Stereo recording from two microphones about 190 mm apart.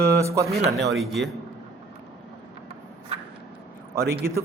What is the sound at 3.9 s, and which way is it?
Speech, 15° right (ahead or behind).